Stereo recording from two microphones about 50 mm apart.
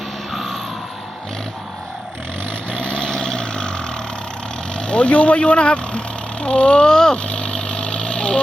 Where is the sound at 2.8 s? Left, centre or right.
Centre.